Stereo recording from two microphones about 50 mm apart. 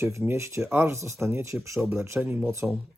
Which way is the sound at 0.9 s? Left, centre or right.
Right.